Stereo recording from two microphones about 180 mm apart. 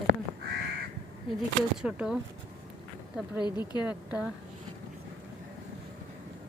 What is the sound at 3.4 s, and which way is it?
Speech, 25° left (ahead or behind).